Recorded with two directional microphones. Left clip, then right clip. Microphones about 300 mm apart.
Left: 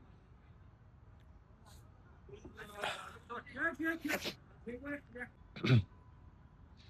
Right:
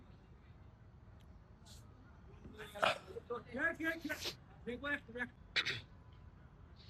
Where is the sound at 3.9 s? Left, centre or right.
Left.